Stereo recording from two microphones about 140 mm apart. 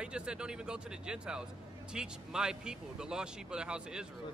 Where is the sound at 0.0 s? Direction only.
5° right (ahead or behind).